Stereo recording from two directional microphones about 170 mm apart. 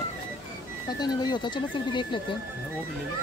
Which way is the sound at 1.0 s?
25° left (ahead or behind).